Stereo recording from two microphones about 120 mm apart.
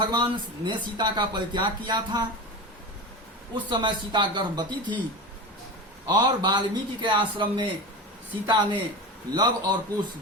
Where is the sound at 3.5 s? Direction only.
40° right (ahead or behind).